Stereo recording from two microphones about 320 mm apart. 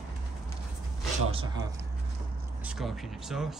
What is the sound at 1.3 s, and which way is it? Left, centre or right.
Speech, centre.